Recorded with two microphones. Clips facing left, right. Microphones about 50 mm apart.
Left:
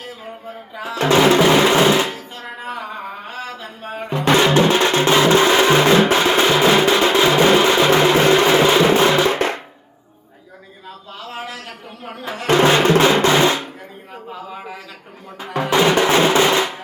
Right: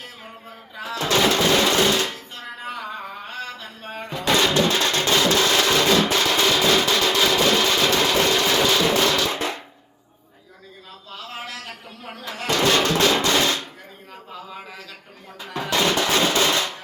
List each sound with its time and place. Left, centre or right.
1.0 s music: left
4.1 s music: left
9.3 s drum: left
11.3 s a sound: centre
12.1 s music: left
13.0 s drum: left
14.3 s a sound: centre
15.4 s drum: left